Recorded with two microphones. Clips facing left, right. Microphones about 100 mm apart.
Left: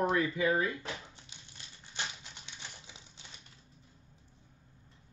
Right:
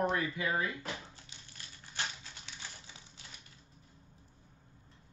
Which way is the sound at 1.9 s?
20° left (ahead or behind).